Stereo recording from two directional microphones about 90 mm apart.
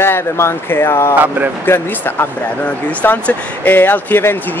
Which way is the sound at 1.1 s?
20° right (ahead or behind).